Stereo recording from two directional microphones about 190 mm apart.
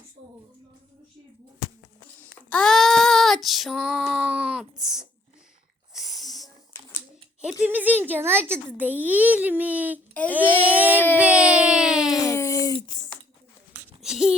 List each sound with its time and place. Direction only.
2.2 s child singing: 5° left (ahead or behind)
5.9 s wheeze: centre (ahead or behind)
7.6 s a child's voice: 10° right (ahead or behind)
11.2 s a sound: 5° right (ahead or behind)
12.3 s a sound: 15° left (ahead or behind)
13.7 s babbling: 5° right (ahead or behind)